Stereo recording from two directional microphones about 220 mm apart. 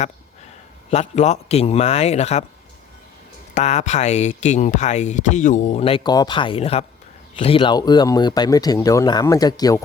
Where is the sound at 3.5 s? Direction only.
30° left (ahead or behind).